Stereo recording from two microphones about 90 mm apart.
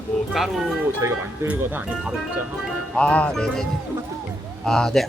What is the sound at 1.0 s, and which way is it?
Speech, 30° right (ahead or behind).